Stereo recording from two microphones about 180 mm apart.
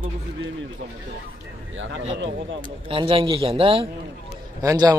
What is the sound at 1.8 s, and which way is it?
Speech, 90° right.